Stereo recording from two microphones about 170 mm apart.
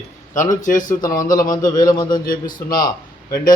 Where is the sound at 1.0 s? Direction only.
20° left (ahead or behind).